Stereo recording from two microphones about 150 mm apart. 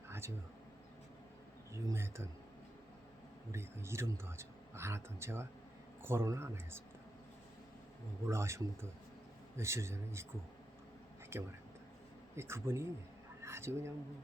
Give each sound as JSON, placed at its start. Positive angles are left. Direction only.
{"t": 1.7, "sound": "speech", "side_deg": -20}
{"t": 3.5, "sound": "speech", "side_deg": -15}
{"t": 8.3, "sound": "a man's voice", "side_deg": -20}
{"t": 11.3, "sound": "speech", "side_deg": -15}